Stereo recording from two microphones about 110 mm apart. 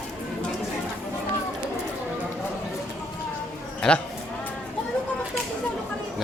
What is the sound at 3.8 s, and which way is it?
Speech, 10° left (ahead or behind).